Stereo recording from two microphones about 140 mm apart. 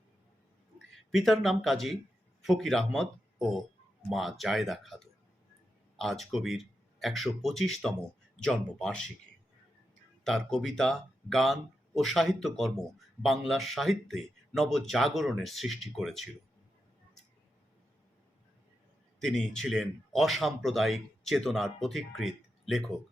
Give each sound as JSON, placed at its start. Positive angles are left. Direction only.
{"t": 1.1, "sound": "speech", "side_deg": 0}
{"t": 10.2, "sound": "speech", "side_deg": 5}
{"t": 19.2, "sound": "speech", "side_deg": 5}